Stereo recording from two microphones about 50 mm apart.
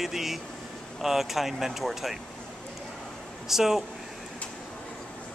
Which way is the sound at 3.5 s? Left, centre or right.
Centre.